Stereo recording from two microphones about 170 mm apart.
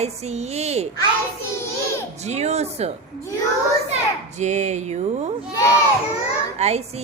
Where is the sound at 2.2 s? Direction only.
40° right (ahead or behind).